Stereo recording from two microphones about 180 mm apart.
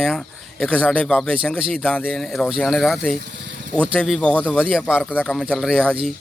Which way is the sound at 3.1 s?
70° right (ahead or behind).